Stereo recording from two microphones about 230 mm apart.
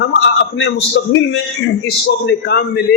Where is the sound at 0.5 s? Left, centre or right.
Left.